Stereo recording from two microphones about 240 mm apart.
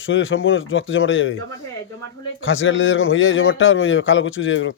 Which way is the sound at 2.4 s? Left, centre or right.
Left.